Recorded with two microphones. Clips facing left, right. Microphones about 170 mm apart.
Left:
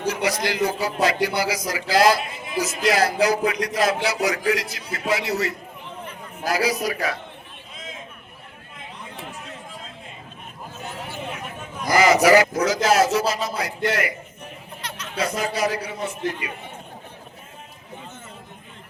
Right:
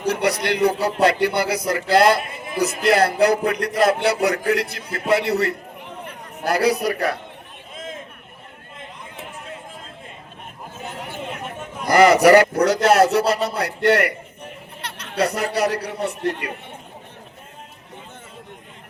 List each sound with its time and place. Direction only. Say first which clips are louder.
0.0 s a man's voice: right 3 dB; 65° right (ahead or behind)
7.8 s a sound: right 5 dB; 50° right (ahead or behind)
11.8 s a man's voice: right 4 dB; 60° right (ahead or behind)